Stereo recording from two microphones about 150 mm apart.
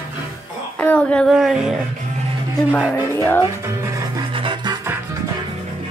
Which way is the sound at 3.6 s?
20° right (ahead or behind).